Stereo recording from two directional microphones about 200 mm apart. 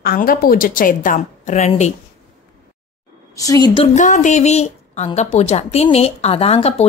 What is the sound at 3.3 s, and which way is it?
Speech, 20° left (ahead or behind).